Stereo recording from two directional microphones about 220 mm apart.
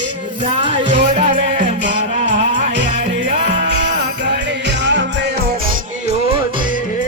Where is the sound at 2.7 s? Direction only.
50° right (ahead or behind).